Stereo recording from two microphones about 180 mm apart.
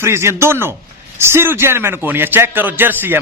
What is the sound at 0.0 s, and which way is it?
A man's voice, 15° right (ahead or behind).